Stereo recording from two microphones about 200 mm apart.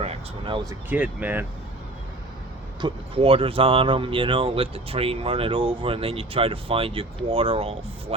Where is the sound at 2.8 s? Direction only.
25° right (ahead or behind).